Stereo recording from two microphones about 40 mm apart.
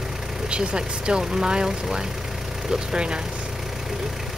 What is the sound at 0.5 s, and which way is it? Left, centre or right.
Speech, right.